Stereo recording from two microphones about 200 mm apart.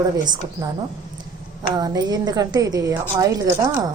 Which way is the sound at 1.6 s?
20° right (ahead or behind).